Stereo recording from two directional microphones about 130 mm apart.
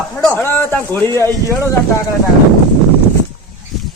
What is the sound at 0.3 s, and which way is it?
Speech, 15° left (ahead or behind).